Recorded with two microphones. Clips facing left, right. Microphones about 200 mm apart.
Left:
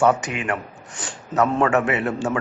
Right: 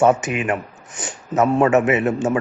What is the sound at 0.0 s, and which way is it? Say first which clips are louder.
A man's voice: right 3 dB; 20° right (ahead or behind).